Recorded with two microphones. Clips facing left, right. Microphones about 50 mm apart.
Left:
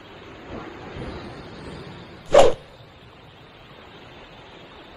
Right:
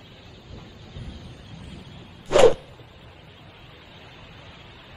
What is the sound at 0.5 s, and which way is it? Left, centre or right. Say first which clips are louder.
Vehicle: left 10 dB; left.